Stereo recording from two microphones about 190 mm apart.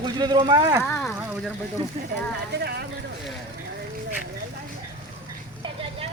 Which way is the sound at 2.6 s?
55° right (ahead or behind).